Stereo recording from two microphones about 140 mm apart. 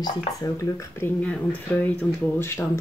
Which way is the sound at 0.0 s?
30° left (ahead or behind).